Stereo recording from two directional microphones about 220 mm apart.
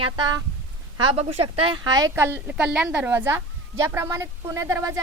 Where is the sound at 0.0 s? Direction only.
20° right (ahead or behind).